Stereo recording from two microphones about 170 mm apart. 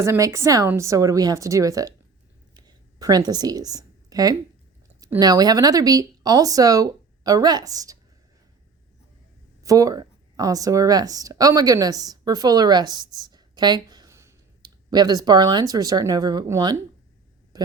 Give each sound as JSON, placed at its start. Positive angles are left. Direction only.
{"t": 0.0, "sound": "speech", "side_deg": -15}
{"t": 2.6, "sound": "a sound", "side_deg": -25}
{"t": 5.2, "sound": "speech", "side_deg": -20}
{"t": 9.6, "sound": "speech", "side_deg": -20}